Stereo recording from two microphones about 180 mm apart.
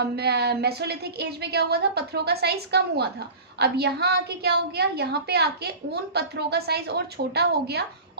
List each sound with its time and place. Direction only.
0.0 s speech: 65° right (ahead or behind)